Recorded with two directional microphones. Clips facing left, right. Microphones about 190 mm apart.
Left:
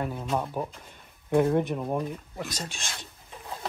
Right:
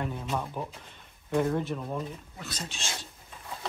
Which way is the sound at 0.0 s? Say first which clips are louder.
Left 3 dB; 10° left (ahead or behind).